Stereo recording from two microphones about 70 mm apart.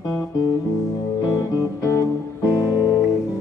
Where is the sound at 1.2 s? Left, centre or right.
Left.